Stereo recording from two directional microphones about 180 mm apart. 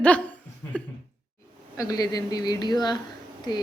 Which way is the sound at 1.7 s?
20° left (ahead or behind).